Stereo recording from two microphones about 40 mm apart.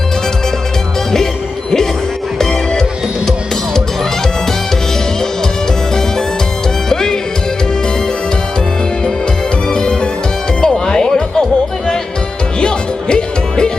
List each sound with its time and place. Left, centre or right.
2.4 s music: centre
6.9 s music: centre
9.6 s music: centre
12.5 s music: left